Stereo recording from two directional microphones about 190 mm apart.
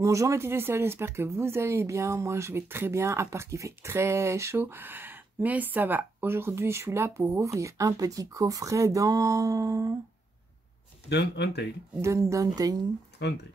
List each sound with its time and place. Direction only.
0.0 s speech: 15° right (ahead or behind)
11.1 s speech: 65° left (ahead or behind)
12.0 s speech: 15° right (ahead or behind)
13.2 s speech: 65° left (ahead or behind)